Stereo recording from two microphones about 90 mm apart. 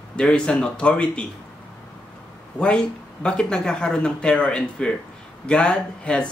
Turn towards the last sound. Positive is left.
turn(degrees=10)  # may be behind; listen again after turning